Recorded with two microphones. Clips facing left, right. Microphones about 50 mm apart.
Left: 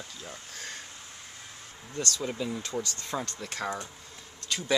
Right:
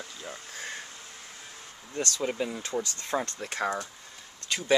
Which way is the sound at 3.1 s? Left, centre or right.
Right.